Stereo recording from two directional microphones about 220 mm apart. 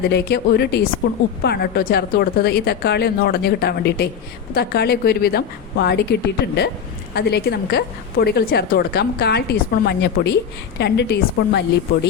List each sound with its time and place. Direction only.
0.1 s a woman's voice: 45° left (ahead or behind)